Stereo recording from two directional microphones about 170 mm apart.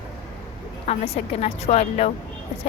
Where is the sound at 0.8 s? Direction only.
35° left (ahead or behind).